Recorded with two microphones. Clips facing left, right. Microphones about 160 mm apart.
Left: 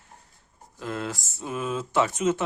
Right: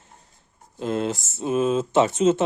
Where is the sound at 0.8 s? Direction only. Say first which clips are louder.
Right 7 dB; 25° right (ahead or behind).